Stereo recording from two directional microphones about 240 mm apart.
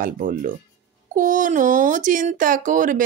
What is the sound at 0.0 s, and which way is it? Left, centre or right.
Speech, right.